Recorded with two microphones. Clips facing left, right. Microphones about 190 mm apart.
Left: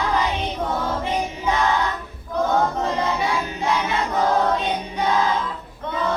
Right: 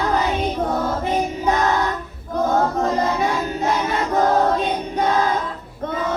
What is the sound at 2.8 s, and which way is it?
Choir, 45° right (ahead or behind).